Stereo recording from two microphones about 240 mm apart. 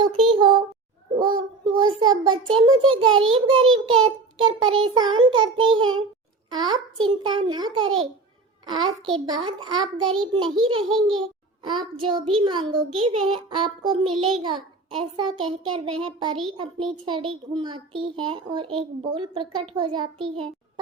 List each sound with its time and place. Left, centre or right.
0.0 s a sound: centre
1.2 s a child's voice: centre
3.6 s a child's voice: right
4.0 s child singing: centre
4.9 s a child's voice: centre
9.1 s a child's voice: centre
10.8 s a child's voice: centre
11.6 s a child's voice: centre